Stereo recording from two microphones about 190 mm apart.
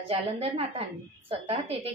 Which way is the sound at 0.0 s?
30° right (ahead or behind).